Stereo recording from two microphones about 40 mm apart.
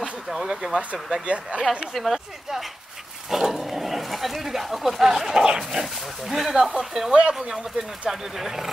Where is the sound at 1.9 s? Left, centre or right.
Centre.